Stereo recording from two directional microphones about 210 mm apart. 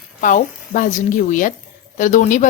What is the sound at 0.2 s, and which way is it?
A woman's voice, 40° left (ahead or behind).